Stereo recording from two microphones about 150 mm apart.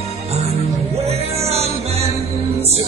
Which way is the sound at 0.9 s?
45° right (ahead or behind).